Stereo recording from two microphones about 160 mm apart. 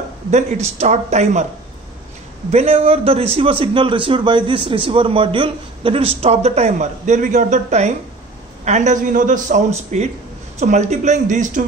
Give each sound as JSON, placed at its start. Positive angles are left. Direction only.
{"t": 0.3, "sound": "speech", "side_deg": -45}
{"t": 2.5, "sound": "a man's voice", "side_deg": -40}